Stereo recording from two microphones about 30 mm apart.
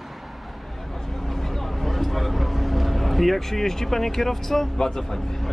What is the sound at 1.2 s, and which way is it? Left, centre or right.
Vehicle, centre.